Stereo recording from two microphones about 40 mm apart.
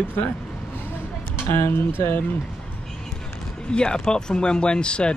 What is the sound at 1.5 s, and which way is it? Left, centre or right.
Speech, left.